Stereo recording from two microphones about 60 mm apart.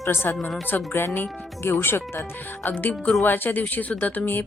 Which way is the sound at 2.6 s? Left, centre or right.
Left.